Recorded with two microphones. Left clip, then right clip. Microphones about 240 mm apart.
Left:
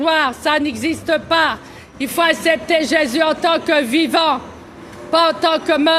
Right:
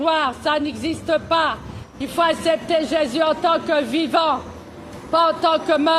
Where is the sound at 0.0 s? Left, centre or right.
Left.